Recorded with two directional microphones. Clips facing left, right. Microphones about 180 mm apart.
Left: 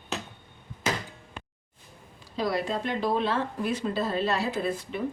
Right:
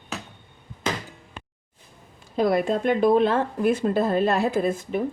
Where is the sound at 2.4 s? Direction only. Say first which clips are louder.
Right 7 dB; 55° right (ahead or behind).